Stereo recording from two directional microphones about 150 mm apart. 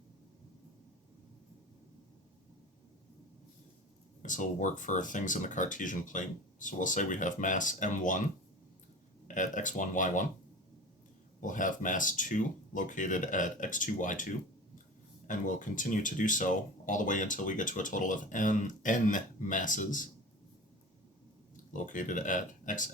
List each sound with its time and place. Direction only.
4.2 s speech: 60° left (ahead or behind)
9.2 s speech: 60° left (ahead or behind)
11.3 s speech: 60° left (ahead or behind)
15.3 s speech: 60° left (ahead or behind)
21.5 s speech: 60° left (ahead or behind)